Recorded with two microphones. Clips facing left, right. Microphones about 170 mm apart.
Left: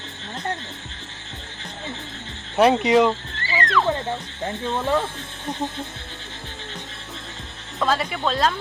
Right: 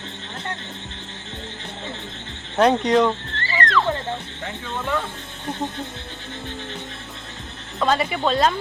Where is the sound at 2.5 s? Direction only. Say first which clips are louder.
Left 1 dB; 5° left (ahead or behind).